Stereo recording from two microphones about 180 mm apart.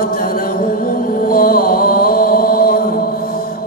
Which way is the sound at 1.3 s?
55° left (ahead or behind).